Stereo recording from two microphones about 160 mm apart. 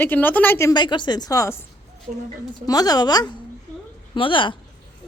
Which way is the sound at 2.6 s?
25° left (ahead or behind).